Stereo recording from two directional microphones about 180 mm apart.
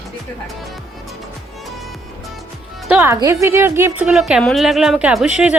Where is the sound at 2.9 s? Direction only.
15° right (ahead or behind).